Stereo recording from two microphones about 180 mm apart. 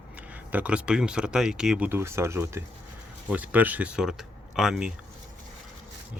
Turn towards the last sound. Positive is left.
turn(degrees=0)  # may be behind; listen again after turning